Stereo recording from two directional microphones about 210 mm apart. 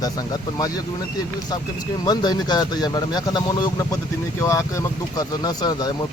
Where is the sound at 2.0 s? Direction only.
20° left (ahead or behind).